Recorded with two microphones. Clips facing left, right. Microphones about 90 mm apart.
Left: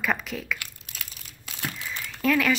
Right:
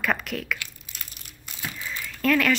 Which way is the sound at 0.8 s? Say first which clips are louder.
Left 1 dB; 80° left.